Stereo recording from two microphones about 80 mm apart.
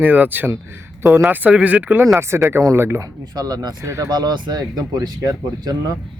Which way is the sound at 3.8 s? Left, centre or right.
Right.